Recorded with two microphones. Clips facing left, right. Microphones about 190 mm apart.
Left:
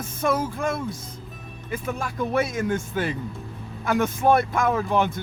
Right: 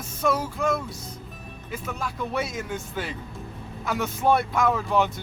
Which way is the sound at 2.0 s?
50° left (ahead or behind).